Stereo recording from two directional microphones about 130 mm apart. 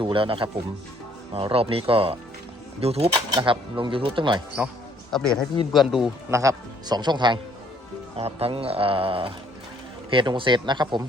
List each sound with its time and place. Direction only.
0.0 s speech: 45° right (ahead or behind)
3.2 s speech: 35° right (ahead or behind)
5.1 s speech: 5° left (ahead or behind)
6.3 s speech: 25° right (ahead or behind)
8.1 s speech: 50° right (ahead or behind)